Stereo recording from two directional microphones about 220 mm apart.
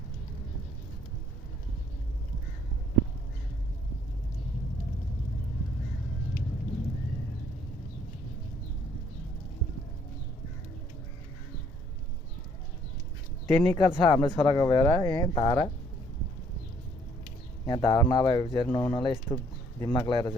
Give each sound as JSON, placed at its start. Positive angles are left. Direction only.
{"t": 13.6, "sound": "speech", "side_deg": 10}
{"t": 17.7, "sound": "speech", "side_deg": 20}
{"t": 18.6, "sound": "speech", "side_deg": 5}
{"t": 20.1, "sound": "speech", "side_deg": 20}